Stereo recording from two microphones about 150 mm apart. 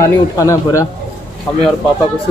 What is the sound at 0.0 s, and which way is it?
Speech, 20° left (ahead or behind).